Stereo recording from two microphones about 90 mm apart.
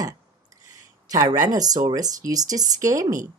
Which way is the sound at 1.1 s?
40° right (ahead or behind).